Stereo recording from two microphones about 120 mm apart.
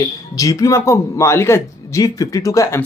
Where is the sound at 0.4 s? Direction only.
30° left (ahead or behind).